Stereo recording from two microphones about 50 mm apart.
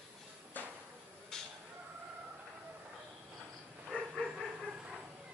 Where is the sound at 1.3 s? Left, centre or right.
Centre.